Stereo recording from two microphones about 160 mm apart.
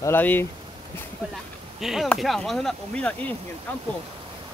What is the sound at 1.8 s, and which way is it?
Speech, centre (ahead or behind).